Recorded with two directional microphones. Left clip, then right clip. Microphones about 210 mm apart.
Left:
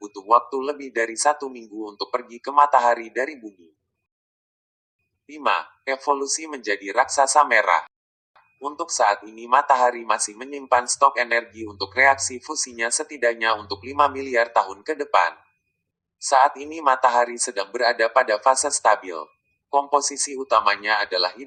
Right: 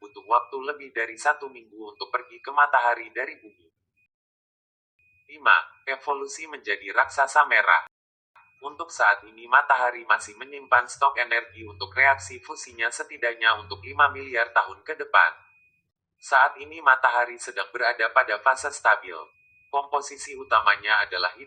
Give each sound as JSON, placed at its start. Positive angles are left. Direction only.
{"t": 0.1, "sound": "speech", "side_deg": 55}
{"t": 5.2, "sound": "speech", "side_deg": 50}